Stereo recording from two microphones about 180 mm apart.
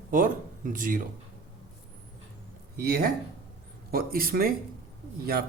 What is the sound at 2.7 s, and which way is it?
Speech, 60° right (ahead or behind).